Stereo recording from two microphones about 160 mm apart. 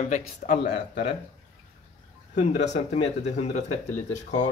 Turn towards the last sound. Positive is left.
turn(degrees=45)  # may be behind; listen again after turning